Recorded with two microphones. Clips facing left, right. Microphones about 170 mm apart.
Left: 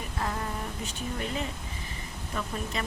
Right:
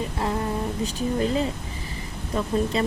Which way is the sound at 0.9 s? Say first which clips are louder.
Right 10 dB; 35° right (ahead or behind).